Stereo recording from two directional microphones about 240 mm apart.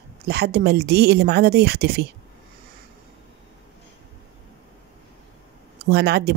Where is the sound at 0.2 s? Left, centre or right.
Right.